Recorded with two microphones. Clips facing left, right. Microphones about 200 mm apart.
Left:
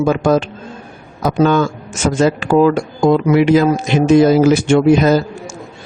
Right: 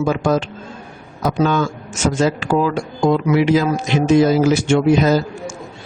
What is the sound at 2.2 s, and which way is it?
A man's voice, 55° left (ahead or behind).